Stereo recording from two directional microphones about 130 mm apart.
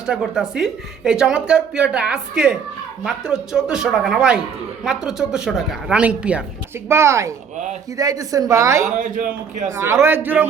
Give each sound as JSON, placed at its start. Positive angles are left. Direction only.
{"t": 0.0, "sound": "speech", "side_deg": -5}
{"t": 6.8, "sound": "a woman's voice", "side_deg": -20}